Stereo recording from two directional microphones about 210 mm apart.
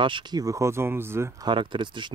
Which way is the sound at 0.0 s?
20° right (ahead or behind).